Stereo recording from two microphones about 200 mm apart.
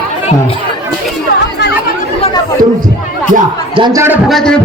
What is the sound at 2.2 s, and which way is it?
Chatter, 25° left (ahead or behind).